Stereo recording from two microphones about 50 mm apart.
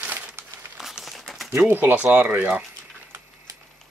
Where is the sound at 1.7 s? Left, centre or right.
Right.